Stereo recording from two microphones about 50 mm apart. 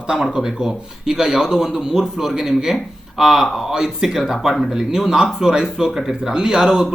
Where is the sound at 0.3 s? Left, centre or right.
Centre.